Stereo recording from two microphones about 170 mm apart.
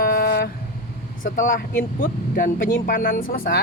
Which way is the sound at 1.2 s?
50° left (ahead or behind).